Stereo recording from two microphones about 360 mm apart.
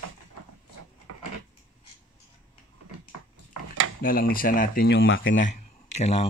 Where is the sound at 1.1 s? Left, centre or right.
Right.